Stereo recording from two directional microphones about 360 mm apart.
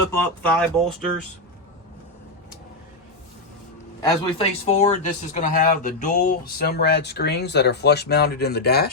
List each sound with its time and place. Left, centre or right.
0.6 s speech: centre
4.0 s speech: centre; by 8.9 s left